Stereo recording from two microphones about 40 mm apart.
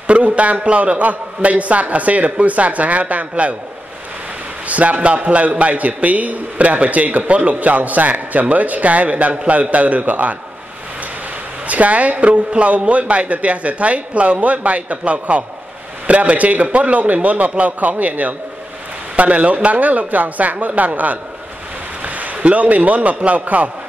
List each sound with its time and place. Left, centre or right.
0.0 s a man's voice: right
4.6 s a man's voice: right
11.6 s a man's voice: right